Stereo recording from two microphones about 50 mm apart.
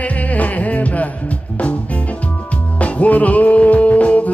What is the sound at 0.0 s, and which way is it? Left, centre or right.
Music, left.